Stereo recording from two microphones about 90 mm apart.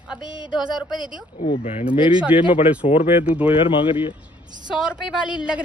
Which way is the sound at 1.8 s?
70° left (ahead or behind).